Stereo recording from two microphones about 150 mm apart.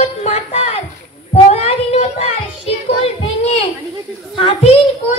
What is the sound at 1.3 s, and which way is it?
Child singing, 45° left (ahead or behind).